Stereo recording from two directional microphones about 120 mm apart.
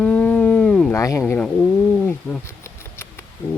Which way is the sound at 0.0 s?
10° left (ahead or behind).